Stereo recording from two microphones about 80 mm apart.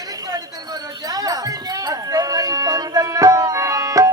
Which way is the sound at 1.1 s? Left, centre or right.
Right.